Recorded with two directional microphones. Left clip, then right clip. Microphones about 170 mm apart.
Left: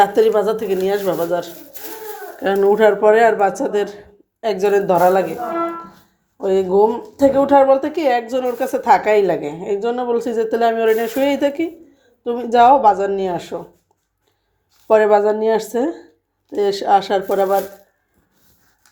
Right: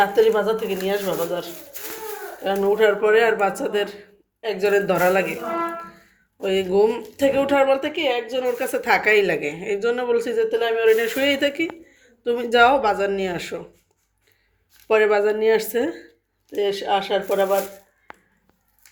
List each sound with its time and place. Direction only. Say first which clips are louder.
0.0 s speech: left 4 dB; 45° left (ahead or behind)
2.6 s speech: left 5 dB; 30° left (ahead or behind)
4.4 s a sound: left 6 dB; 35° left (ahead or behind)
4.6 s a woman's voice: left 4 dB; 15° left (ahead or behind)
6.4 s a woman's voice: left 4 dB; 10° left (ahead or behind)
7.9 s speech: left 5 dB; 30° left (ahead or behind)
8.4 s a woman's voice: left 6 dB; 15° left (ahead or behind)
10.3 s speech: left 4 dB; 35° left (ahead or behind)
10.8 s a woman's voice: left 2 dB; 15° left (ahead or behind)
14.8 s a woman's voice: left 5 dB; 20° left (ahead or behind)
16.6 s speech: left 6 dB; 35° left (ahead or behind)